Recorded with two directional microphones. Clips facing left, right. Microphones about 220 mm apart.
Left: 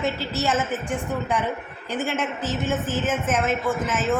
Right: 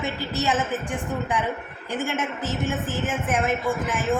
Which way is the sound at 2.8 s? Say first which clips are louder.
Left 2 dB; 15° right (ahead or behind).